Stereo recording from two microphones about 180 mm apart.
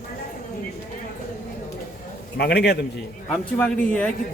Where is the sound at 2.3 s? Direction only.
65° left (ahead or behind).